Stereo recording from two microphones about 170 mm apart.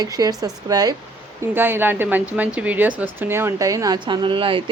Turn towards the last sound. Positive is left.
turn(degrees=-30)  # may be behind; listen again after turning